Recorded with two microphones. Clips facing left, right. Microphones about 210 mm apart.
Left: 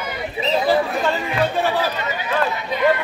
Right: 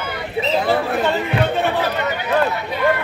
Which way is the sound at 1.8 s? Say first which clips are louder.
Right 3 dB; 65° right (ahead or behind).